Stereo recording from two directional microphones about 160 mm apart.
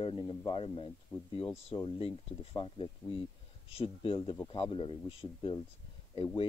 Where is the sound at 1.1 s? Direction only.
15° left (ahead or behind).